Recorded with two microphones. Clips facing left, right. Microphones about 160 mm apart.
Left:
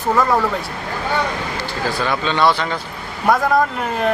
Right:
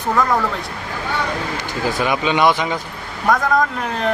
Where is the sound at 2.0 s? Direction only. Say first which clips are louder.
Right 1 dB; 15° right (ahead or behind).